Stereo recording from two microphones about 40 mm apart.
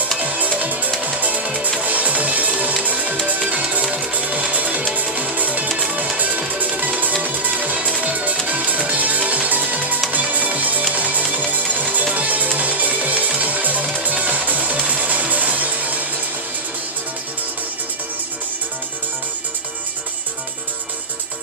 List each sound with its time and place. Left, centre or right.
0.2 s music: right